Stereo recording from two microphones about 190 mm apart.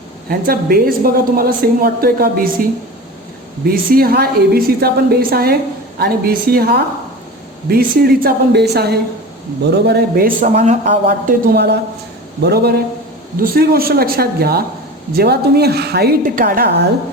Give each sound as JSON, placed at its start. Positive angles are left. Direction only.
{"t": 0.3, "sound": "a woman's voice", "side_deg": -50}
{"t": 3.7, "sound": "a woman's voice", "side_deg": -50}
{"t": 11.0, "sound": "a woman's voice", "side_deg": -55}